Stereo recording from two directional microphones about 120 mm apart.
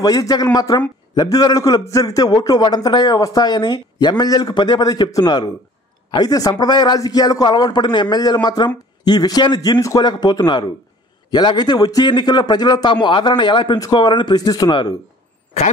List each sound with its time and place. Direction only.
0.0 s a man's voice: 30° left (ahead or behind)